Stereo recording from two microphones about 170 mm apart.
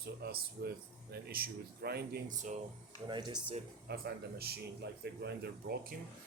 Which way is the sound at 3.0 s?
25° right (ahead or behind).